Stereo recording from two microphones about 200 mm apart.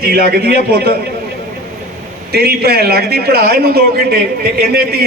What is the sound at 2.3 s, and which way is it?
A man's voice, 50° right (ahead or behind).